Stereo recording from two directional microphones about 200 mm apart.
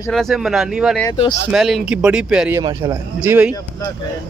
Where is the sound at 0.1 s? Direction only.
Centre (ahead or behind).